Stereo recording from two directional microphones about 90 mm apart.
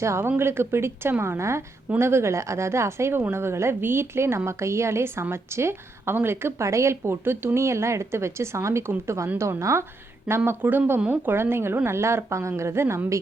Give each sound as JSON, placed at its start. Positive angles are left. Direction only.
{"t": 0.0, "sound": "a woman's voice", "side_deg": -30}